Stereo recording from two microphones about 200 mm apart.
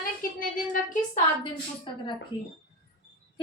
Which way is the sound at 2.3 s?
15° right (ahead or behind).